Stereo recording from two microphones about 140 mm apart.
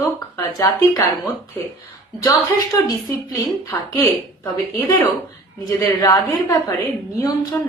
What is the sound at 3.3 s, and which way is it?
Speech, 20° left (ahead or behind).